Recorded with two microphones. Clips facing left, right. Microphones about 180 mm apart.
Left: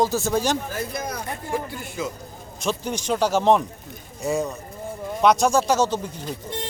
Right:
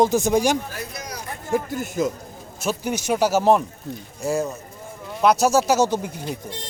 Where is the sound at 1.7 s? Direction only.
45° right (ahead or behind).